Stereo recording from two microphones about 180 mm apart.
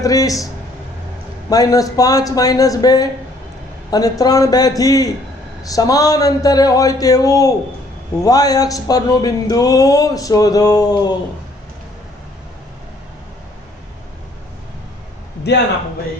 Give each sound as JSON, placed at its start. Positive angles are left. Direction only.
{"t": 0.0, "sound": "speech", "side_deg": 20}
{"t": 1.5, "sound": "speech", "side_deg": 20}